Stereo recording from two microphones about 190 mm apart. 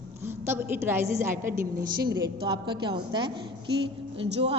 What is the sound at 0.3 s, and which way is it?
A woman's voice, 10° right (ahead or behind).